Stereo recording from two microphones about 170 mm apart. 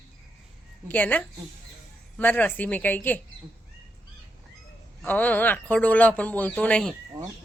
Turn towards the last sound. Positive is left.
turn(degrees=5)  # may be behind; listen again after turning